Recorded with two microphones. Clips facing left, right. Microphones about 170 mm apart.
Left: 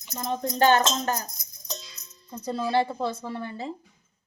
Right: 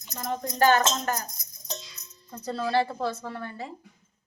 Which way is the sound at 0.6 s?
25° left (ahead or behind).